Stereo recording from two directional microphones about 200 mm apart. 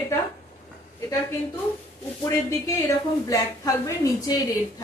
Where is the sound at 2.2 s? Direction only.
15° left (ahead or behind).